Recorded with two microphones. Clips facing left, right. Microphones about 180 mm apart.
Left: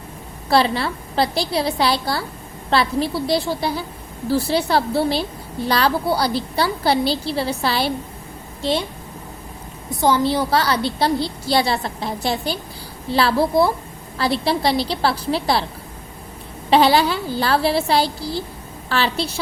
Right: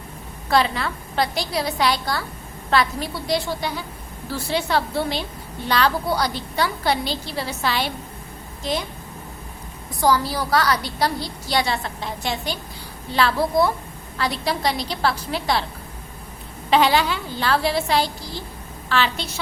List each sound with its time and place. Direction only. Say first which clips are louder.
0.5 s a woman's voice: left 3 dB; 30° left (ahead or behind)
10.0 s a woman's voice: left 3 dB; 25° left (ahead or behind)
16.6 s a woman's voice: left 3 dB; 35° left (ahead or behind)